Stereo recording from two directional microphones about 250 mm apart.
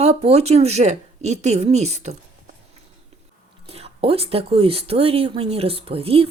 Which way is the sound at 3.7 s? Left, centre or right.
Right.